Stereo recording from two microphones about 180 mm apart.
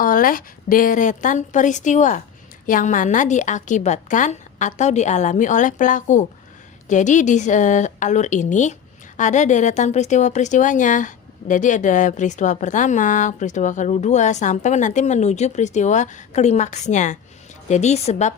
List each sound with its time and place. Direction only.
0.0 s a woman's voice: 50° left (ahead or behind)